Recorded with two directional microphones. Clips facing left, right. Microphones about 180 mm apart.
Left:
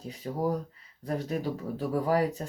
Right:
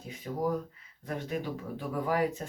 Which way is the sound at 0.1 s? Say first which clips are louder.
Left 1 dB; 35° left (ahead or behind).